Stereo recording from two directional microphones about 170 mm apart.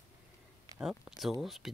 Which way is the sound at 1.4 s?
Centre (ahead or behind).